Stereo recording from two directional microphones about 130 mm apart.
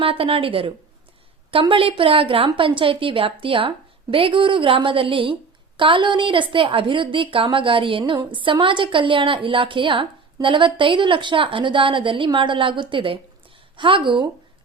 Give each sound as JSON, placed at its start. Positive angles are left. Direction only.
{"t": 0.0, "sound": "a woman's voice", "side_deg": -45}